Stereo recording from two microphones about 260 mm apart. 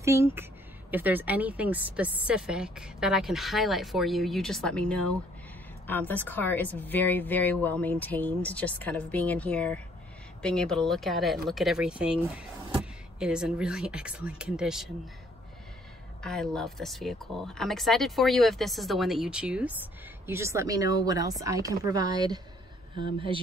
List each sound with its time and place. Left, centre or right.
0.0 s speech: centre
16.2 s speech: centre